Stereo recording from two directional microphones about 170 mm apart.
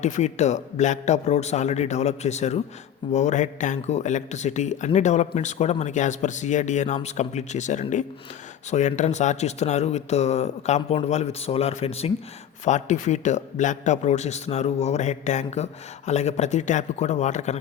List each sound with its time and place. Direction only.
0.0 s a man's voice: 45° left (ahead or behind)